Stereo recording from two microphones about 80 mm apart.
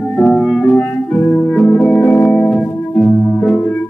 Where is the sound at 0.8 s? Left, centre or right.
Centre.